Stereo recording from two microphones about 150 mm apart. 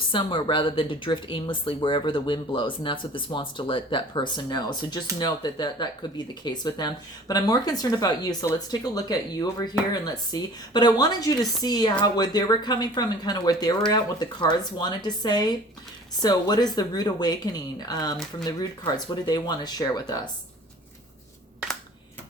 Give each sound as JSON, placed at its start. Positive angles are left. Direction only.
{"t": 0.1, "sound": "speech", "side_deg": 35}
{"t": 19.3, "sound": "speech", "side_deg": 25}